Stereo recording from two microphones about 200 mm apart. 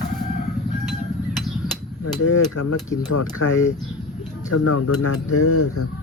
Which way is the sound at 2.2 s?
90° left.